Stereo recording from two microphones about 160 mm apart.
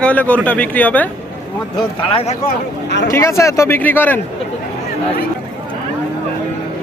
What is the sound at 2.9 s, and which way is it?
Speech, 90° left.